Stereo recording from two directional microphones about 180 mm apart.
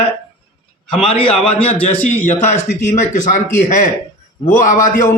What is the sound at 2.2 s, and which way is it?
Speech, 40° left (ahead or behind).